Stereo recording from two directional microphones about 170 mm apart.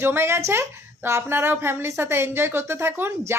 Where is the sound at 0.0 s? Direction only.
15° right (ahead or behind).